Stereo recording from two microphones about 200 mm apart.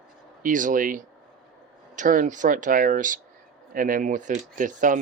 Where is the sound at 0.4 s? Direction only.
40° right (ahead or behind).